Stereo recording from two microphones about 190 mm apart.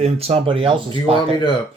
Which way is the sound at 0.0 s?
35° right (ahead or behind).